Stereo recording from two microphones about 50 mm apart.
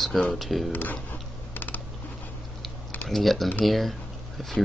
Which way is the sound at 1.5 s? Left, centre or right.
Left.